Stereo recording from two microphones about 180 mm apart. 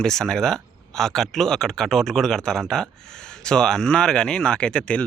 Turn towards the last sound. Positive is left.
turn(degrees=5)  # may be behind; listen again after turning